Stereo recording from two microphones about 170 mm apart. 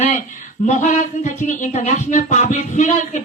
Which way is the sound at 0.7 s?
45° left (ahead or behind).